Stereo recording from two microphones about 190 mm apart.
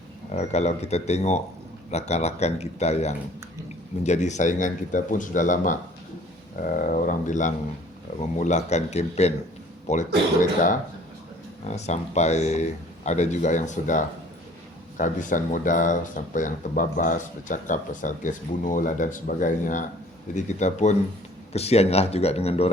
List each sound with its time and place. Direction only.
0.3 s speech: 35° left (ahead or behind)
11.6 s speech: 35° left (ahead or behind)